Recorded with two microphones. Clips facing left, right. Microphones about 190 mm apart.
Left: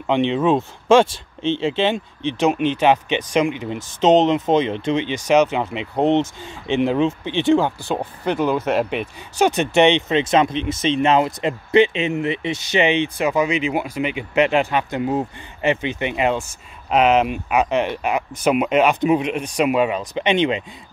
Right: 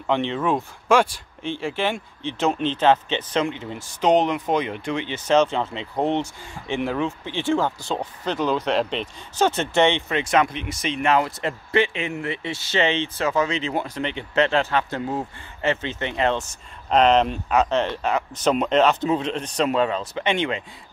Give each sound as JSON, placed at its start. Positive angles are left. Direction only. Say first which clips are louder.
{"t": 0.0, "sound": "speech", "louder": "left 5 dB", "side_deg": 20}